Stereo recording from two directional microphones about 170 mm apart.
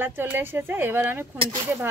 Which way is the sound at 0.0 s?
10° right (ahead or behind).